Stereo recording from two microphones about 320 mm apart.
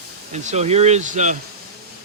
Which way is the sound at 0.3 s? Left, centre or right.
Right.